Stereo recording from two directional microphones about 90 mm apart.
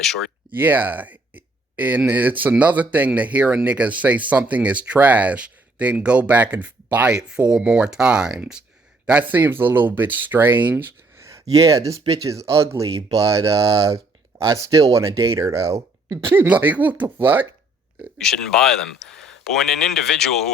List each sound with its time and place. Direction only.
0.0 s speech: 5° left (ahead or behind)
0.5 s speech: 20° right (ahead or behind)
11.3 s speech: 35° right (ahead or behind)
11.9 s speech: 90° right
12.2 s speech: 35° right (ahead or behind)
13.6 s speech: 90° right
14.3 s speech: 35° right (ahead or behind)
16.3 s speech: 20° right (ahead or behind)
18.2 s speech: 5° left (ahead or behind)